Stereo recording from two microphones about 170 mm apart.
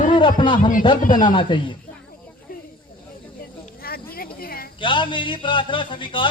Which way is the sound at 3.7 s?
60° left (ahead or behind).